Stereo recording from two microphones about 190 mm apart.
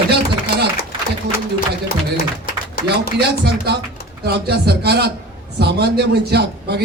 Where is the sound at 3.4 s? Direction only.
60° right (ahead or behind).